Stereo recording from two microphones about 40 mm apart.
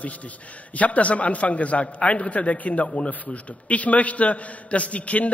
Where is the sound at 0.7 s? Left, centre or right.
Left.